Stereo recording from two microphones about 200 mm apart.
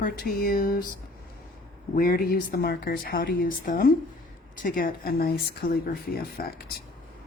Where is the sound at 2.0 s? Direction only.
50° left (ahead or behind).